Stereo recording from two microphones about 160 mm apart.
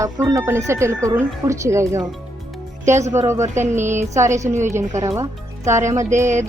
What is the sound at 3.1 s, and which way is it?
Speech, 15° right (ahead or behind).